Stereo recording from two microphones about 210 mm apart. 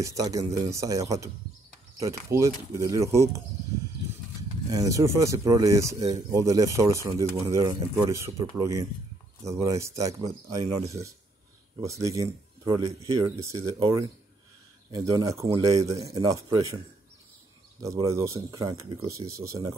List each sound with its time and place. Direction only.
0.0 s speech: 15° right (ahead or behind)
11.8 s speech: 15° right (ahead or behind)
17.8 s speech: 15° right (ahead or behind)